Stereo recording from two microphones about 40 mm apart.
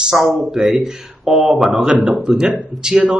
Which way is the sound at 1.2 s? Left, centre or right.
Centre.